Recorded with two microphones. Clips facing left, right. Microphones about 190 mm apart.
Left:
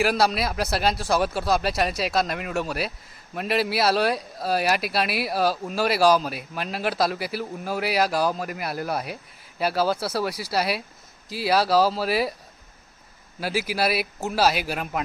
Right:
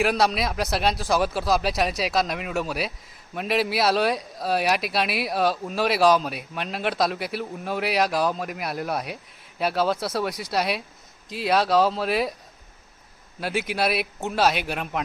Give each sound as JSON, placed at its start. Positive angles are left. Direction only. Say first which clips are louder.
{"t": 0.0, "sound": "speech", "louder": "even", "side_deg": 0}
{"t": 13.4, "sound": "speech", "louder": "even", "side_deg": 0}